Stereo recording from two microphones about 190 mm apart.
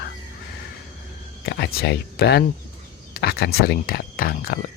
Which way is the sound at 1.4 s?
60° left (ahead or behind).